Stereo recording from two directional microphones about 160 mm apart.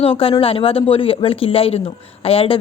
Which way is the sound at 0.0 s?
35° left (ahead or behind).